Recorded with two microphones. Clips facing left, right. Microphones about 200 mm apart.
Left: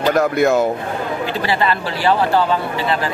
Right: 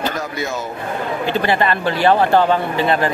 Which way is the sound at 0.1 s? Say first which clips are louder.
Left 10 dB; 60° left (ahead or behind).